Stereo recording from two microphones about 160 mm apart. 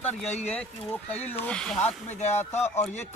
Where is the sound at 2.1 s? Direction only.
45° left (ahead or behind).